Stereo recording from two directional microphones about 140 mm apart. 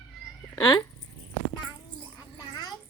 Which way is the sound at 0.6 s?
30° left (ahead or behind).